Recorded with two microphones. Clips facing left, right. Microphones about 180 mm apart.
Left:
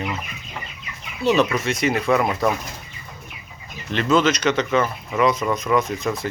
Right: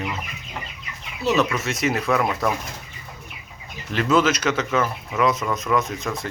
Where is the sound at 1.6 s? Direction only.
Centre (ahead or behind).